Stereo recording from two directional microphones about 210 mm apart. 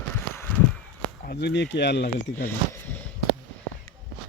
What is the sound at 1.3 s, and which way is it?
Speech, 55° left (ahead or behind).